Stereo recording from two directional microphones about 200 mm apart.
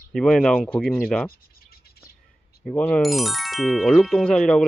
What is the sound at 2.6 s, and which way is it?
Speech, 5° left (ahead or behind).